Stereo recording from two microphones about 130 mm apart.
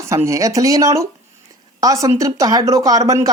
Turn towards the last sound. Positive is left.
turn(degrees=-25)  # may be behind; listen again after turning